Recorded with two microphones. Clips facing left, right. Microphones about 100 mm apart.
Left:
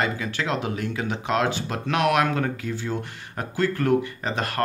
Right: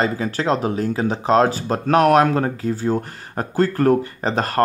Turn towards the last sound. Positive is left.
turn(degrees=-35)  # may be behind; listen again after turning